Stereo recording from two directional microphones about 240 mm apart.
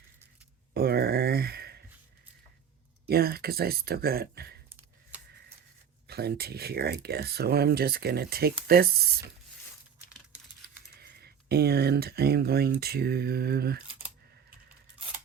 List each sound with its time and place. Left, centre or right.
0.7 s a sound: right
3.1 s speech: right
6.1 s speech: right
11.0 s speech: right